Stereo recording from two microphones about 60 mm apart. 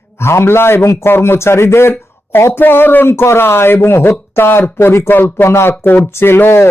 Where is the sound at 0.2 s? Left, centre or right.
Left.